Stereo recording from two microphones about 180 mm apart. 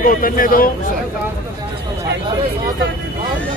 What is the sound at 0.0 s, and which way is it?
Speech, 50° left (ahead or behind).